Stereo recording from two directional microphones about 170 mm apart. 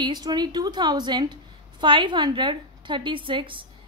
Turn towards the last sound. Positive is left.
turn(degrees=-30)  # may be behind; listen again after turning